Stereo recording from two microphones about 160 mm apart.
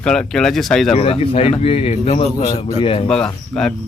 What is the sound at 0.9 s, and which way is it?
Speech, 40° left (ahead or behind).